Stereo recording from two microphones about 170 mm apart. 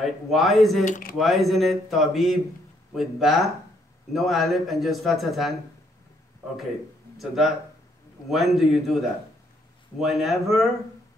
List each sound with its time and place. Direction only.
0.0 s speech: centre (ahead or behind)
0.8 s speech: 50° left (ahead or behind)
1.1 s speech: centre (ahead or behind)
7.2 s speech: centre (ahead or behind)